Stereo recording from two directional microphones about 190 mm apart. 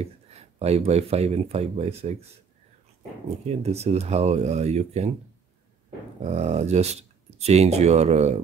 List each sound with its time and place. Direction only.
0.0 s speech: 30° right (ahead or behind)
3.4 s speech: 35° right (ahead or behind)
6.2 s speech: 35° right (ahead or behind)